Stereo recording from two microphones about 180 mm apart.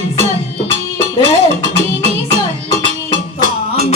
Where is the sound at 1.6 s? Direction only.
35° right (ahead or behind).